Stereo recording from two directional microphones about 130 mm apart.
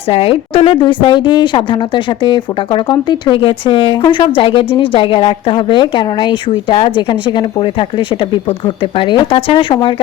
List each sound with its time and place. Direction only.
0.1 s a woman's voice: 45° left (ahead or behind)